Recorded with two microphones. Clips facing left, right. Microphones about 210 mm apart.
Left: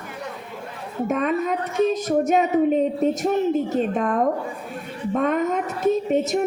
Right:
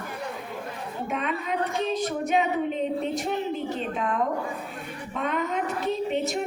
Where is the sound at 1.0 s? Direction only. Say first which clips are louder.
Left 9 dB; 45° left (ahead or behind).